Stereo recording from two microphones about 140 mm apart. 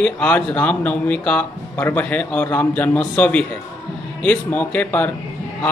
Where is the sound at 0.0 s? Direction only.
10° left (ahead or behind).